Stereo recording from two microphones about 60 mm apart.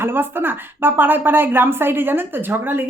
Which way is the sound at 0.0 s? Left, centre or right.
Right.